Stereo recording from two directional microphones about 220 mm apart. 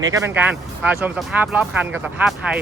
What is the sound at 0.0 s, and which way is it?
Speech, 15° right (ahead or behind).